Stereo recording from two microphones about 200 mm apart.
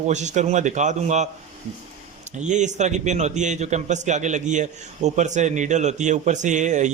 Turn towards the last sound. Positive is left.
turn(degrees=-35)  # may be behind; listen again after turning